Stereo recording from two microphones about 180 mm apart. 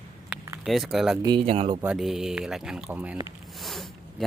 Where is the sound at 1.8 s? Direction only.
5° right (ahead or behind).